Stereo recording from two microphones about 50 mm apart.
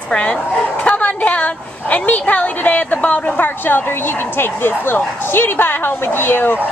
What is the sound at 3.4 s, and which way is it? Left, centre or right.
A woman's voice, left.